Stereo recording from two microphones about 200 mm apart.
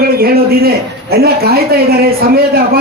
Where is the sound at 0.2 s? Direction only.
50° right (ahead or behind).